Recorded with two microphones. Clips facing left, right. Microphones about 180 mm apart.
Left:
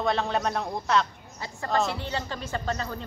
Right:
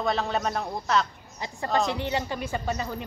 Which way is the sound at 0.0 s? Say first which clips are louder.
Left 1 dB; centre (ahead or behind).